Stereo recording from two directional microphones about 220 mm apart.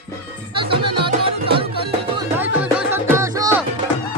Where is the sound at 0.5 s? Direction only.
25° right (ahead or behind).